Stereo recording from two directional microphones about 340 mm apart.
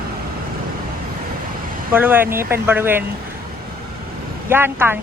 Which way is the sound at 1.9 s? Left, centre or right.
Centre.